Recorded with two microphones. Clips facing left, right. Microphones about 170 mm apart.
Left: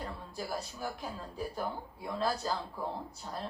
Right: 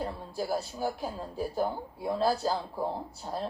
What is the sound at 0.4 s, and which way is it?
Speech, 30° right (ahead or behind).